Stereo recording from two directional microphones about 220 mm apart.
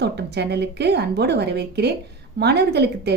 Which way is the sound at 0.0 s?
50° right (ahead or behind).